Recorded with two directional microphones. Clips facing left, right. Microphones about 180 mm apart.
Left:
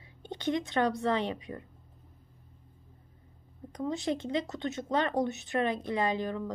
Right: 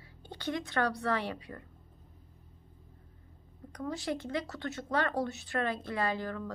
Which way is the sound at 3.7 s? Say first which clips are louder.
Left 4 dB; 20° left (ahead or behind).